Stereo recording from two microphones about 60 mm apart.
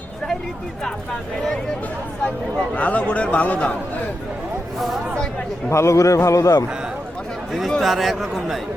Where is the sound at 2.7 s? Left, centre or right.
Left.